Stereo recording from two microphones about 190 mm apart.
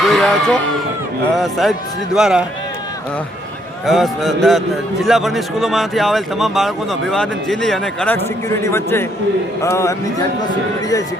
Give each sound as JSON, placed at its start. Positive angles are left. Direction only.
{"t": 0.0, "sound": "music", "side_deg": 0}
{"t": 1.4, "sound": "a man's voice", "side_deg": 0}
{"t": 3.8, "sound": "a man's voice", "side_deg": 0}